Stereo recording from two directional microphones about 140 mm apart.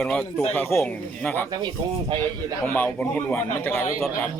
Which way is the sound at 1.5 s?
30° right (ahead or behind).